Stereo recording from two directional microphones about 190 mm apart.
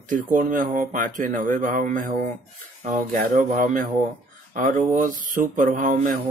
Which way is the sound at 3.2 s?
45° right (ahead or behind).